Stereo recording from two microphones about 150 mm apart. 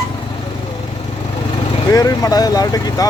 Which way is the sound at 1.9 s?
25° left (ahead or behind).